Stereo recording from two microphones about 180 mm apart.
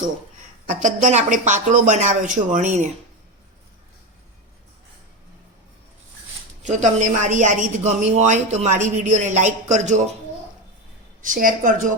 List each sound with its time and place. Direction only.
0.7 s speech: 40° right (ahead or behind)
6.6 s a woman's voice: 40° right (ahead or behind)
11.2 s speech: 50° right (ahead or behind)